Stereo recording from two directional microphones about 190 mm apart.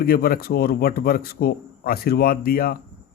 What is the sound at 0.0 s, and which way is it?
A man's voice, 50° left (ahead or behind).